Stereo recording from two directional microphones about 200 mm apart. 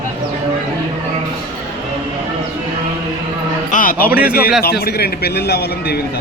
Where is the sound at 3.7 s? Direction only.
45° left (ahead or behind).